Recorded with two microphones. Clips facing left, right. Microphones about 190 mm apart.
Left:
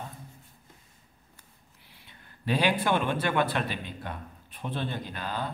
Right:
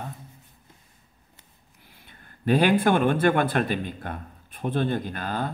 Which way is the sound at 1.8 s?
50° right (ahead or behind).